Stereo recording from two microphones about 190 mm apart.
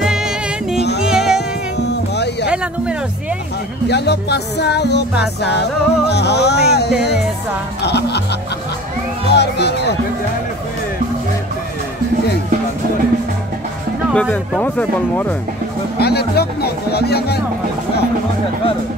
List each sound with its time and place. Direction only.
0.0 s music: 5° right (ahead or behind)
1.8 s music: 60° left (ahead or behind)
2.5 s music: 5° right (ahead or behind)
3.9 s speech: 60° left (ahead or behind)
9.3 s speech: 60° left (ahead or behind)
14.1 s speech: centre (ahead or behind)
16.0 s music: 55° left (ahead or behind)
16.9 s speech: 55° left (ahead or behind)